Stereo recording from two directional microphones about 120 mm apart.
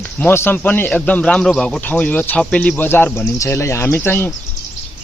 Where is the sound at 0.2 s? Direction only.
20° left (ahead or behind).